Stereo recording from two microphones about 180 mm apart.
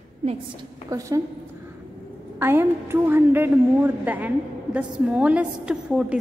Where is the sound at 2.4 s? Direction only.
10° right (ahead or behind).